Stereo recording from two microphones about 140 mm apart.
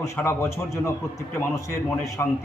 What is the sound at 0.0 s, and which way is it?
A man's voice, 20° left (ahead or behind).